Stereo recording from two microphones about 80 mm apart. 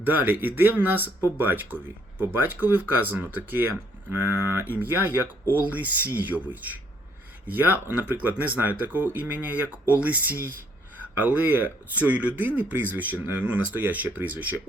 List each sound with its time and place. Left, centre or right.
0.0 s speech: right